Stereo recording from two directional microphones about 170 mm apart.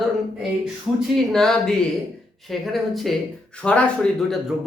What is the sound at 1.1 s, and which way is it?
Speech, centre (ahead or behind).